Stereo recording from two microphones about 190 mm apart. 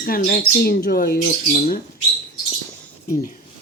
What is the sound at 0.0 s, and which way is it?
Speech, 45° left (ahead or behind).